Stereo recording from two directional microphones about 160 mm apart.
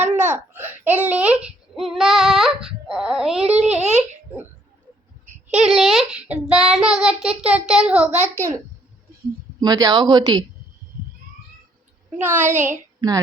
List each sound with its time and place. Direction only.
0.5 s a child's voice: 10° right (ahead or behind)
3.8 s a child's voice: 45° right (ahead or behind)
5.5 s child singing: 5° right (ahead or behind)
8.4 s a child's voice: 20° right (ahead or behind)
12.1 s a child's voice: 10° right (ahead or behind)